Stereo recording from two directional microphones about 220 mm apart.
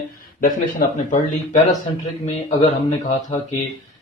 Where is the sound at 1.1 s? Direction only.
30° left (ahead or behind).